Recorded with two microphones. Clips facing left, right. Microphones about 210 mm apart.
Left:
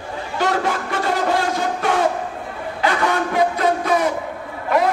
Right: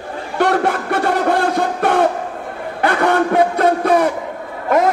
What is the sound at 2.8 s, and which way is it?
A man's voice, 55° right (ahead or behind).